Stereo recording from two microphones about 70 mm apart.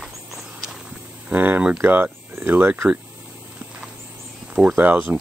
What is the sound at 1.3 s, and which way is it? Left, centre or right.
Speech, right.